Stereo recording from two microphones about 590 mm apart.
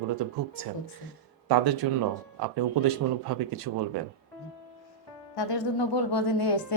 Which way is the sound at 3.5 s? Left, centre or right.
Right.